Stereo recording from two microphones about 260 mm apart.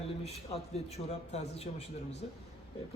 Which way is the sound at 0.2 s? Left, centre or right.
Left.